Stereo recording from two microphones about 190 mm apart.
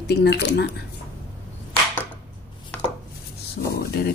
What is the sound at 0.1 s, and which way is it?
Speech, 60° left (ahead or behind).